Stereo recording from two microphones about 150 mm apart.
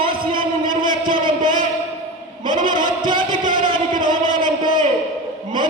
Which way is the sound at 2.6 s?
30° right (ahead or behind).